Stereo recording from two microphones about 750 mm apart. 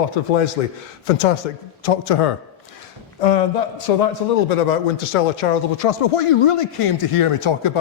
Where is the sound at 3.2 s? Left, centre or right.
Left.